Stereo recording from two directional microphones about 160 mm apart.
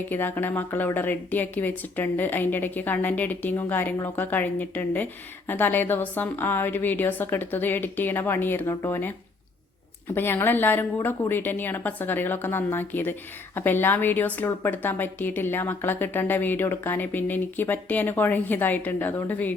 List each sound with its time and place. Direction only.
0.1 s a woman's voice: 10° left (ahead or behind)
10.2 s a woman's voice: 15° left (ahead or behind)